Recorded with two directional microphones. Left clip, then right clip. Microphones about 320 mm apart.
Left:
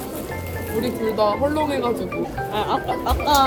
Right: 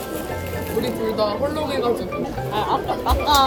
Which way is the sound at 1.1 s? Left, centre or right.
Centre.